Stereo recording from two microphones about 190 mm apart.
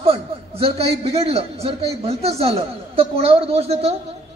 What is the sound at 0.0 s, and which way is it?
A man's voice, 30° right (ahead or behind).